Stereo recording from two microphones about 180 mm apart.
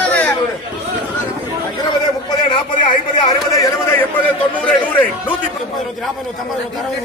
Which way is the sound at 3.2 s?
20° left (ahead or behind).